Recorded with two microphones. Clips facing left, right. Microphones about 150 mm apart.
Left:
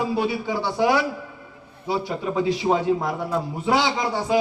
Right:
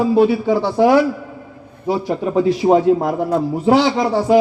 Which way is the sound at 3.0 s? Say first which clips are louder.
Right 7 dB; 45° right (ahead or behind).